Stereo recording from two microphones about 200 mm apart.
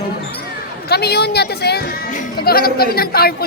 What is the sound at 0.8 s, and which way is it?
Speech, 55° left (ahead or behind).